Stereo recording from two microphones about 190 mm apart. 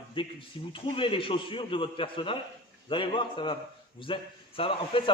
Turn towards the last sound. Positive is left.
turn(degrees=30)  # may be behind; listen again after turning